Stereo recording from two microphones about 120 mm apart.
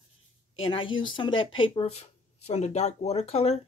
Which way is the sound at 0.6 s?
45° left (ahead or behind).